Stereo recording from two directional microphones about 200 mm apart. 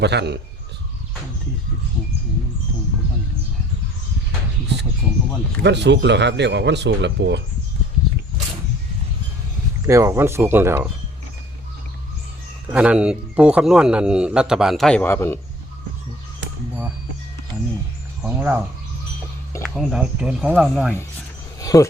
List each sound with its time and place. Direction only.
0.0 s speech: 55° right (ahead or behind)
5.6 s speech: 60° right (ahead or behind)
9.8 s speech: 15° right (ahead or behind)
12.6 s a man's voice: 5° right (ahead or behind); by 15.4 s 10° left (ahead or behind)
18.2 s speech: 5° right (ahead or behind)
19.6 s a man's voice: centre (ahead or behind)
21.6 s a sound: 15° left (ahead or behind)